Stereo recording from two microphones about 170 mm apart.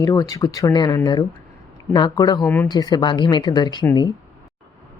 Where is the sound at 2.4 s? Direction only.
10° left (ahead or behind).